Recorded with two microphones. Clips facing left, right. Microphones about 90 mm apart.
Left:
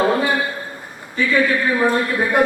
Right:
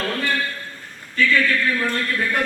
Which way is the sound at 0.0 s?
20° left (ahead or behind).